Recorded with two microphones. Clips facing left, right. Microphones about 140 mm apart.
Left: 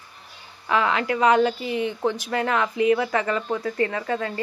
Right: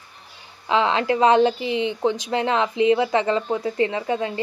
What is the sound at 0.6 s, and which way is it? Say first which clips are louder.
Speech: right 3 dB; 25° right (ahead or behind).